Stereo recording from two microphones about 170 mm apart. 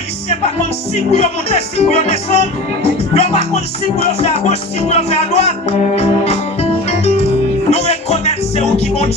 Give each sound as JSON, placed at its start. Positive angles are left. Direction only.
{"t": 1.1, "sound": "speech", "side_deg": 40}
{"t": 4.2, "sound": "music", "side_deg": 40}